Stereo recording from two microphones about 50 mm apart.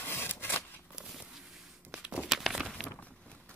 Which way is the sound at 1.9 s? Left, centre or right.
Centre.